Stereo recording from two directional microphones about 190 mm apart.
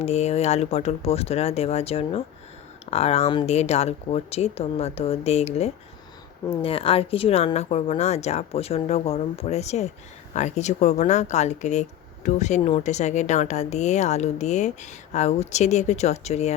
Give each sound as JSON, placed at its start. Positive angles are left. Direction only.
{"t": 0.0, "sound": "speech", "side_deg": 35}